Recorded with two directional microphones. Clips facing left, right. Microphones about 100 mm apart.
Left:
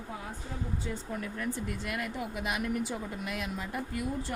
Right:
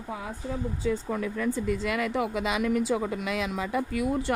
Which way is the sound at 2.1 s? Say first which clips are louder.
Right 7 dB; 90° right.